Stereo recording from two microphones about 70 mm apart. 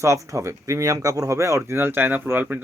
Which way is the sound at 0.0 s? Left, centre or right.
Right.